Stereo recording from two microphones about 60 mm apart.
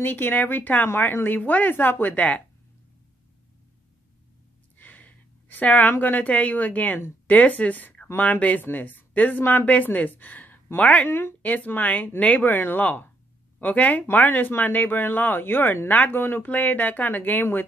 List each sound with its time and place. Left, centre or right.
0.0 s speech: left
4.7 s speech: left
11.1 s a woman's voice: left
11.4 s speech: left
16.4 s speech: left